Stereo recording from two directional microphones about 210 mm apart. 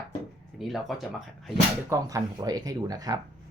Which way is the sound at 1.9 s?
15° right (ahead or behind).